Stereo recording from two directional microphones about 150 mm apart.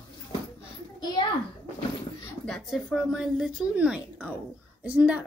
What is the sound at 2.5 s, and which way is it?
Speech, centre (ahead or behind).